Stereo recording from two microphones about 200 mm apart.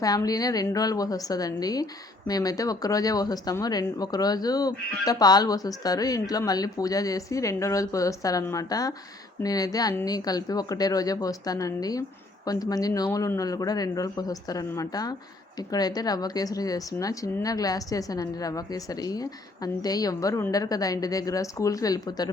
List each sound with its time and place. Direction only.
0.0 s a woman's voice: 20° left (ahead or behind)